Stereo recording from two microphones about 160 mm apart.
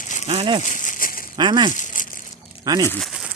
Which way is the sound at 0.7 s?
55° left (ahead or behind).